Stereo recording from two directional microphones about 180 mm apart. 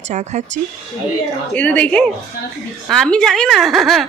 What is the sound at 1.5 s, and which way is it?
A woman's voice, 10° left (ahead or behind).